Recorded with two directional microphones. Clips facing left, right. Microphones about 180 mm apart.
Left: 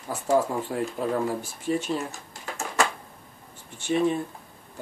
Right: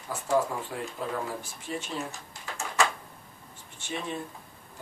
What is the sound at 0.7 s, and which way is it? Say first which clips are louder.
Speech: left 7 dB; 50° left (ahead or behind).